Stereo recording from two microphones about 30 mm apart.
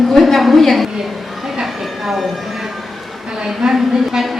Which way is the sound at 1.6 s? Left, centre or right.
Centre.